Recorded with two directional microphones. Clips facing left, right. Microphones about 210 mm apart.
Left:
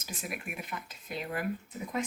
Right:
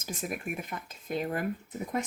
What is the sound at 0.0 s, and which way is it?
Speech, 45° right (ahead or behind).